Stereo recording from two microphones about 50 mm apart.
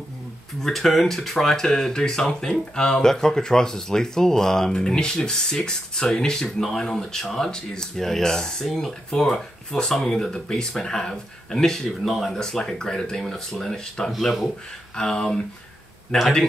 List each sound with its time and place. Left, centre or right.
0.6 s speech: centre
15.0 s speech: centre